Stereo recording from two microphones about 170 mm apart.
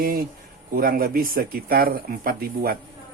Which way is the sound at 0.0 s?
55° right (ahead or behind).